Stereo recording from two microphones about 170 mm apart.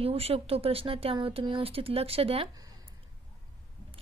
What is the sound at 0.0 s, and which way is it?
A woman's voice, 35° right (ahead or behind).